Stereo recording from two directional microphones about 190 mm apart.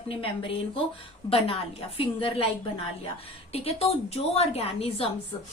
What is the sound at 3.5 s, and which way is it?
A woman's voice, 30° left (ahead or behind).